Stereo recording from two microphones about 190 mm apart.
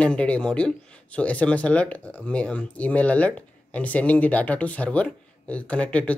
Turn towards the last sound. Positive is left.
turn(degrees=5)  # may be behind; listen again after turning